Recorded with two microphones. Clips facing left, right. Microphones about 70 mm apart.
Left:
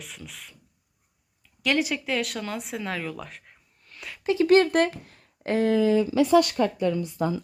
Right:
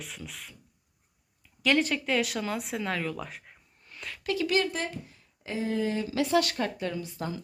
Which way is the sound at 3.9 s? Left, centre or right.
Centre.